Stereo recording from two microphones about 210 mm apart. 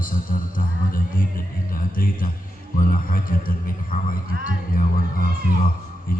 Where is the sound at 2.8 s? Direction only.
40° left (ahead or behind).